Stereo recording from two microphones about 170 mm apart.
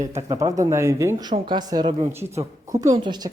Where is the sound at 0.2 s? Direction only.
20° right (ahead or behind).